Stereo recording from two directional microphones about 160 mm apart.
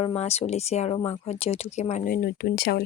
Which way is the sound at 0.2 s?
40° left (ahead or behind).